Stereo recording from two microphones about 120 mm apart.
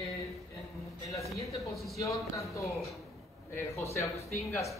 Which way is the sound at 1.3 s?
25° left (ahead or behind).